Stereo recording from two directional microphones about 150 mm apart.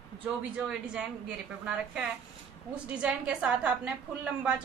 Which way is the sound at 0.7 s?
10° right (ahead or behind).